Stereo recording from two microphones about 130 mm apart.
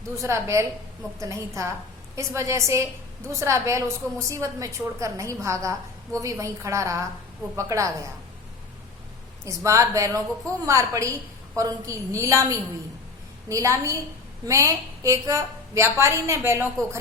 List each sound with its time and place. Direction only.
0.2 s a woman's voice: 20° right (ahead or behind)
9.4 s a woman's voice: 25° right (ahead or behind)